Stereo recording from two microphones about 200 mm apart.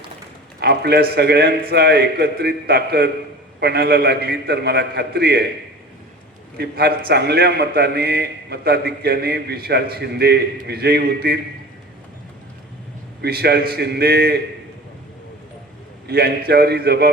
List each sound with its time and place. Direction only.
0.6 s a man's voice: 50° right (ahead or behind)
6.6 s a man's voice: 50° right (ahead or behind)
13.2 s a man's voice: 50° right (ahead or behind)
16.0 s a man's voice: 50° right (ahead or behind)